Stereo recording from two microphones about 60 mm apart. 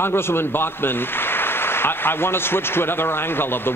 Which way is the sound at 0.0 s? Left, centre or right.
Left.